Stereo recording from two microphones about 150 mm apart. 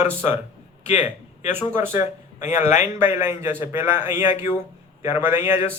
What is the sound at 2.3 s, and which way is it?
Speech, 55° left (ahead or behind).